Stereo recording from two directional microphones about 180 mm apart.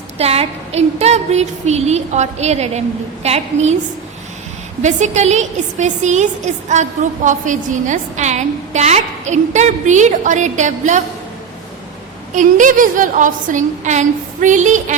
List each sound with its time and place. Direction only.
0.2 s a woman's voice: 35° right (ahead or behind)
4.8 s a woman's voice: 40° right (ahead or behind)
12.3 s a woman's voice: 45° right (ahead or behind)